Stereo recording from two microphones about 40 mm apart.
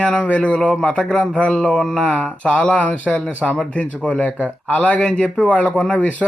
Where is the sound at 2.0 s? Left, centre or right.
Left.